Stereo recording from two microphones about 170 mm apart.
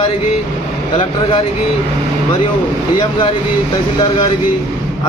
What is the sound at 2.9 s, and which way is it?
A man's voice, 30° left (ahead or behind).